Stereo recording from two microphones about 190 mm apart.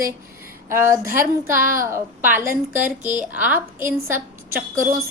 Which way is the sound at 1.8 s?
10° right (ahead or behind).